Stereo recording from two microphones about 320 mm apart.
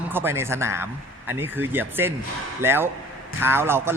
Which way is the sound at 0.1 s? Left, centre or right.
Centre.